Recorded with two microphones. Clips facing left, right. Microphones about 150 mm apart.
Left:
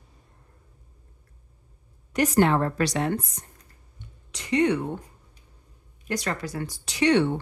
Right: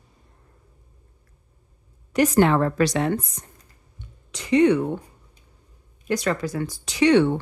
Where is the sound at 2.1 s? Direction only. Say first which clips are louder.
Right 3 dB; 90° right.